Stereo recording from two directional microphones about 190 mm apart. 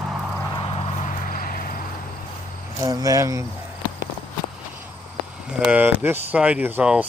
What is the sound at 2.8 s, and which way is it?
Speech, 20° right (ahead or behind).